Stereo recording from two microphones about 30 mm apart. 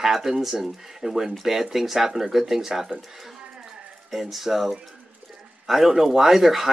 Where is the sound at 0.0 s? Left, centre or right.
Centre.